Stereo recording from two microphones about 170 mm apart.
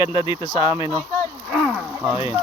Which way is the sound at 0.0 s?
30° left (ahead or behind).